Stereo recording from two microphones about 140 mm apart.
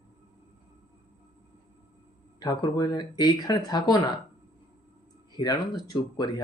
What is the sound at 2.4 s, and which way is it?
Speech, 30° left (ahead or behind).